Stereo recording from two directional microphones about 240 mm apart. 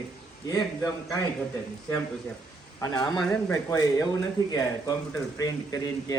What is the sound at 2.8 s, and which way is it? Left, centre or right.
Speech, centre.